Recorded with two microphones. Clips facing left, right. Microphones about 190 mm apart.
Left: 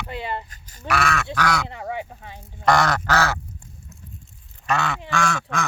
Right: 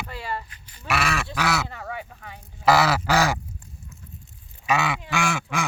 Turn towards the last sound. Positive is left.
turn(degrees=-10)  # may be behind; listen again after turning